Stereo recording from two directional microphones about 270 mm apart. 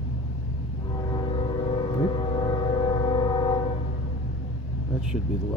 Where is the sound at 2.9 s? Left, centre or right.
Centre.